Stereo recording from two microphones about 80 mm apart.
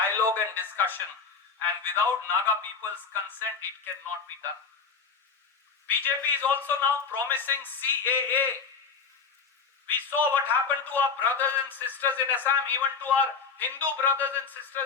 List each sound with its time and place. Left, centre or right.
0.0 s a man's voice: left
5.9 s a man's voice: left
9.8 s a man's voice: left